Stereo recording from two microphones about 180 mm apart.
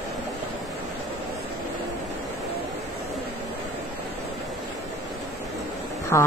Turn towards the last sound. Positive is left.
turn(degrees=15)  # may be behind; listen again after turning